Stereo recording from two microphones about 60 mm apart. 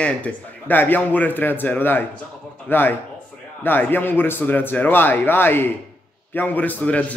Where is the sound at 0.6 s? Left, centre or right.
Left.